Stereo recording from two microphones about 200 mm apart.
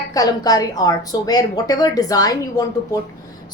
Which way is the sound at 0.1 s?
20° left (ahead or behind).